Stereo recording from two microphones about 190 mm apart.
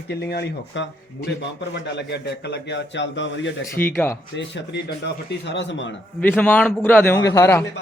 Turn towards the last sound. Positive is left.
turn(degrees=15)  # may be behind; listen again after turning